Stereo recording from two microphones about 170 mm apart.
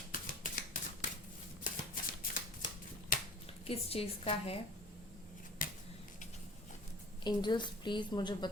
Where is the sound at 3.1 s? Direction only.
55° left (ahead or behind).